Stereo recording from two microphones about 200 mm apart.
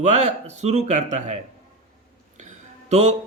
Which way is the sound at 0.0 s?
35° right (ahead or behind).